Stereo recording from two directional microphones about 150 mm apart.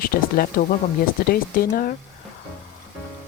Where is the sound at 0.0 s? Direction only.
80° left.